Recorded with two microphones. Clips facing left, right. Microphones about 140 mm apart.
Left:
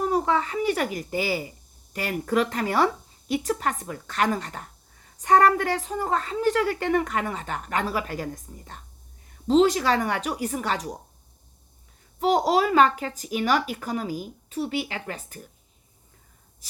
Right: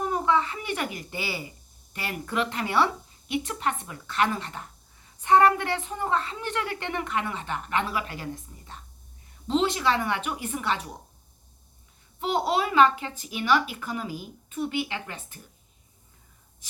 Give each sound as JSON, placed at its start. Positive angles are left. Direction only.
{"t": 0.0, "sound": "a woman's voice", "side_deg": 40}
{"t": 12.2, "sound": "a woman's voice", "side_deg": 40}